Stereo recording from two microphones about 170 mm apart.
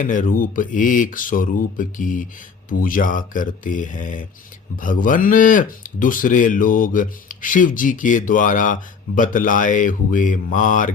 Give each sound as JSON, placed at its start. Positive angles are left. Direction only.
{"t": 0.0, "sound": "speech", "side_deg": 50}